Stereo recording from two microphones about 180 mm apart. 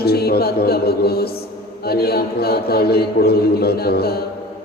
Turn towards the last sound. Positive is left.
turn(degrees=60)  # may be behind; listen again after turning